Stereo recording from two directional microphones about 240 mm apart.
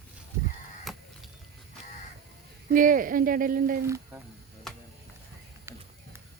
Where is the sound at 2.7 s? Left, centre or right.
Right.